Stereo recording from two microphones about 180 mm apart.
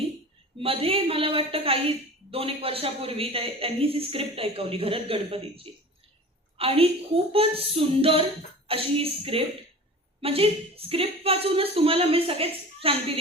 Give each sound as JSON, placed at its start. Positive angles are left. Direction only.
{"t": 0.6, "sound": "a woman's voice", "side_deg": -30}